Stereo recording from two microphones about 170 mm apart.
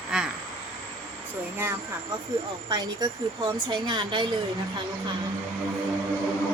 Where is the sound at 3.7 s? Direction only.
25° right (ahead or behind).